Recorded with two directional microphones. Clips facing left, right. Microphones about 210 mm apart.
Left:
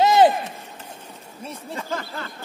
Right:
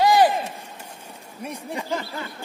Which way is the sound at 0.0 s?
25° left (ahead or behind).